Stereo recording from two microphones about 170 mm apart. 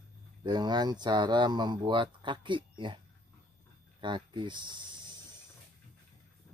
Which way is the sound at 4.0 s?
30° right (ahead or behind).